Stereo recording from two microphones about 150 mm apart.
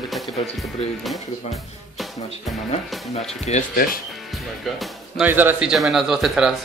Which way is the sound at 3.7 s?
75° left (ahead or behind).